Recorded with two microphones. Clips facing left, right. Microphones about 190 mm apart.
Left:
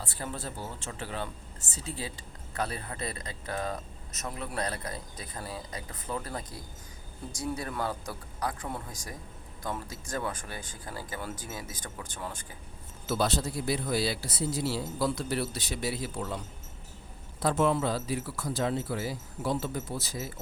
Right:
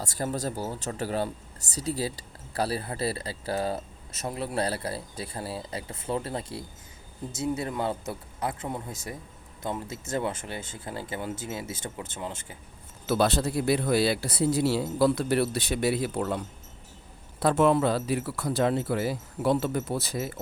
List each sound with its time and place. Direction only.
0.0 s speech: 40° right (ahead or behind); by 12.5 s 25° right (ahead or behind)
13.1 s speech: 65° right (ahead or behind)
17.4 s speech: 60° right (ahead or behind)